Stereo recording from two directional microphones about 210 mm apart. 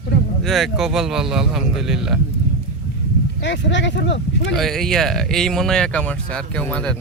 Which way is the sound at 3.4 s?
60° left (ahead or behind).